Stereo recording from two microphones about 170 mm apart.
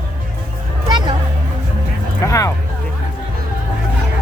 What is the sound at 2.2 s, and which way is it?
Speech, 20° left (ahead or behind).